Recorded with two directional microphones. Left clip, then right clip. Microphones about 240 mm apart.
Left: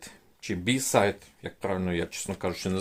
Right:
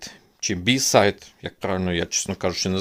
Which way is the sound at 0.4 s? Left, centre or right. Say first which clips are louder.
Right 8 dB; right.